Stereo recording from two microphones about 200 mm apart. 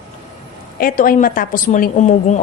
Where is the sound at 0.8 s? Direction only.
45° left (ahead or behind).